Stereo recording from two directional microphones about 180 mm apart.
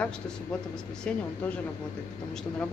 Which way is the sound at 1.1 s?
5° left (ahead or behind).